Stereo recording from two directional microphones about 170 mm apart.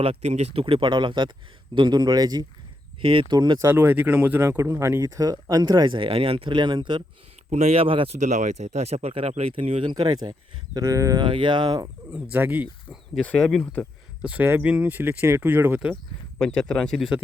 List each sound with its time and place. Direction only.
0.0 s speech: 40° right (ahead or behind)
3.7 s speech: 10° right (ahead or behind)
7.5 s speech: 40° right (ahead or behind)
9.9 s speech: 25° right (ahead or behind)
12.1 s speech: 10° right (ahead or behind)
13.1 s speech: 5° left (ahead or behind)
14.2 s speech: 10° right (ahead or behind)
16.4 s speech: 5° left (ahead or behind)